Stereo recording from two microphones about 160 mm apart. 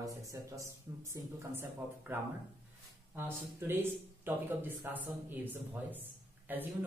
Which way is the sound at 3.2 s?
15° right (ahead or behind).